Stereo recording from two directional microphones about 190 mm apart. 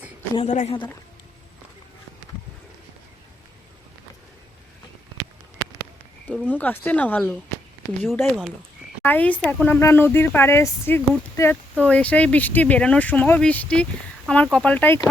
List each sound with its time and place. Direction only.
0.3 s a woman's voice: 35° left (ahead or behind)
6.2 s speech: 10° left (ahead or behind)